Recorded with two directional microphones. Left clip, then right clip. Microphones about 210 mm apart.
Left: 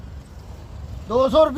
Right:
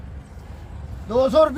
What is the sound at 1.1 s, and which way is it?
Speech, 10° right (ahead or behind).